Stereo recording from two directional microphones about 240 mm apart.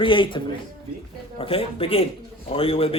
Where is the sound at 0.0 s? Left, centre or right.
Left.